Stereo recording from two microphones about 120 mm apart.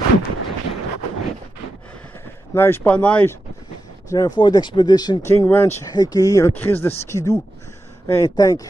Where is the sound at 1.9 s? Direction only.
15° left (ahead or behind).